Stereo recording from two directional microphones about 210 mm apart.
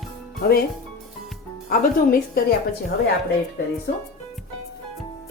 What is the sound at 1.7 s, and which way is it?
Speech, 45° left (ahead or behind).